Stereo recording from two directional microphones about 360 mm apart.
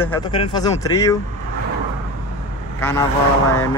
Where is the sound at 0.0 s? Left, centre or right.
Centre.